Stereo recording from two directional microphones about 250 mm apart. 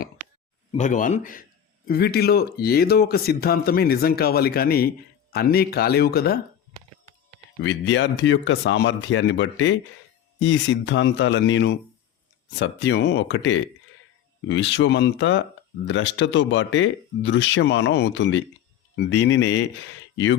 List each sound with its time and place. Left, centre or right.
0.8 s speech: left
7.6 s speech: left